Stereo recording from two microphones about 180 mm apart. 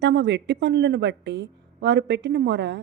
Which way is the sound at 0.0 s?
75° right (ahead or behind).